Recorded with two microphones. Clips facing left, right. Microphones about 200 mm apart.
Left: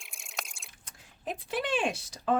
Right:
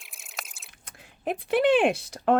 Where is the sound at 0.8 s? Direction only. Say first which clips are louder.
Right 7 dB; 60° right (ahead or behind).